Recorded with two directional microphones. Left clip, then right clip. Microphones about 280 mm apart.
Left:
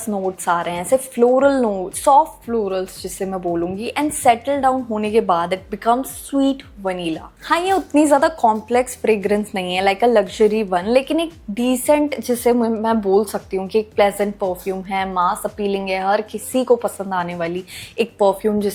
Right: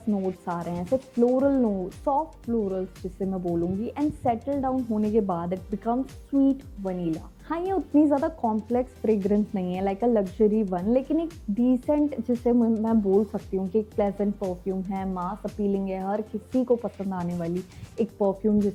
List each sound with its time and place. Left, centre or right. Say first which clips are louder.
0.1 s a woman's voice: left 10 dB; centre
1.7 s a woman's voice: left 12 dB; left
8.7 s a woman's voice: left 8 dB; centre
13.1 s speech: left 6 dB; left
13.6 s a woman's voice: left 9 dB; centre
14.3 s speech: left 9 dB; left
14.6 s a woman's voice: left 9 dB; centre
16.6 s a woman's voice: left 11 dB; centre
17.9 s speech: left 9 dB; left